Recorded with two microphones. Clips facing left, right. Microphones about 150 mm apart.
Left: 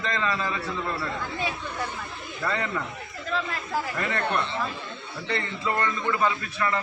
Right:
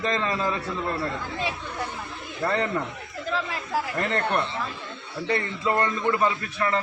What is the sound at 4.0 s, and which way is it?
Speech, 35° right (ahead or behind).